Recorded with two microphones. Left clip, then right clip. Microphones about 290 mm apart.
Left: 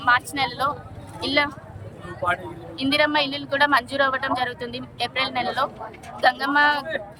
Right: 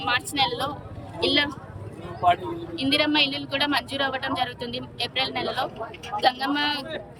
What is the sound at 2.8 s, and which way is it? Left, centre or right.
A woman's voice, centre.